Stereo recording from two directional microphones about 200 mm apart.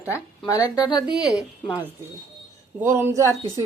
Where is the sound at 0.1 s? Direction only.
15° left (ahead or behind).